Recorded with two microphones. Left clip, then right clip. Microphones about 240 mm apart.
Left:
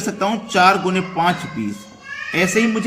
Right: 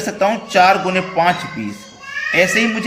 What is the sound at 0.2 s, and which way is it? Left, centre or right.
Speech, centre.